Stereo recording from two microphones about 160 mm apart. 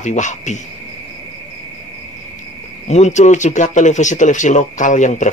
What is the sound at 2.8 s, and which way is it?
Speech, 45° left (ahead or behind).